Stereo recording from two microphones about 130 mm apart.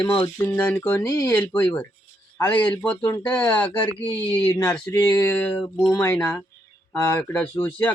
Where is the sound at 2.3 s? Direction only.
10° left (ahead or behind).